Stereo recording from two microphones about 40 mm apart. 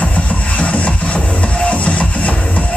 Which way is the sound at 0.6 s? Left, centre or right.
Left.